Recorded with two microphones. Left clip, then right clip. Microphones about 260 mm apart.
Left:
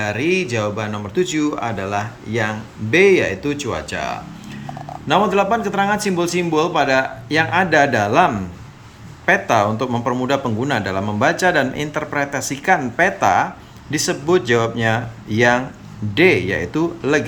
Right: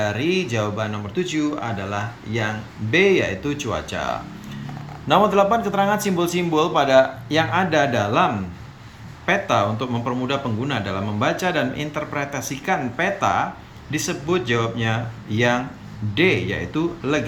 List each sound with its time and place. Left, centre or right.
0.0 s speech: centre